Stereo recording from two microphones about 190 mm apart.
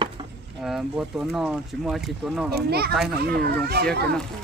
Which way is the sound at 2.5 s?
55° right (ahead or behind).